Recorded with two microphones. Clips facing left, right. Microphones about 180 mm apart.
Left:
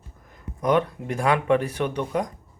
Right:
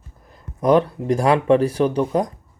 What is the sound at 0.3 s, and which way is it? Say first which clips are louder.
Speech: right 6 dB; 35° right (ahead or behind).